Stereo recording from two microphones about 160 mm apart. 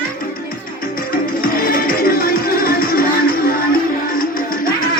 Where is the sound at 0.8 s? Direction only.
65° left (ahead or behind).